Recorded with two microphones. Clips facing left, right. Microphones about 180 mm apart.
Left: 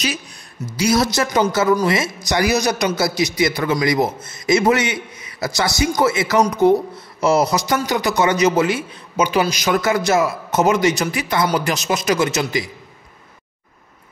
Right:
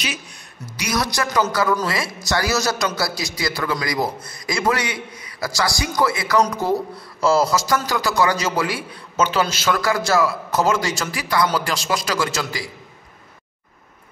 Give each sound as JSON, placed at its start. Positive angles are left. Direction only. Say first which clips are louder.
{"t": 0.7, "sound": "speech", "louder": "left 7 dB", "side_deg": 30}